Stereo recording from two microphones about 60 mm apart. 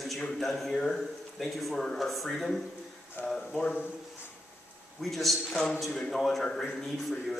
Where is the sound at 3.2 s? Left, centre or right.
Left.